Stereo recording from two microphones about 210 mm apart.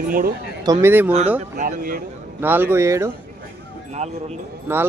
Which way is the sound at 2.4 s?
10° right (ahead or behind).